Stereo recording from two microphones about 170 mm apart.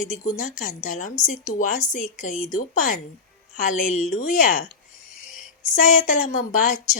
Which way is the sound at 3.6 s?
45° left (ahead or behind).